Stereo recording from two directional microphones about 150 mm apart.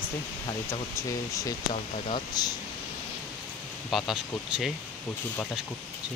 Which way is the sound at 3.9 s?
Centre (ahead or behind).